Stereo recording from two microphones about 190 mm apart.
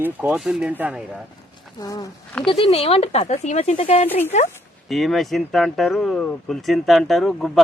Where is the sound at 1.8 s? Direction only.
20° left (ahead or behind).